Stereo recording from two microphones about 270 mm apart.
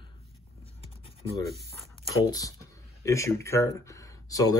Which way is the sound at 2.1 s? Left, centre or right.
Centre.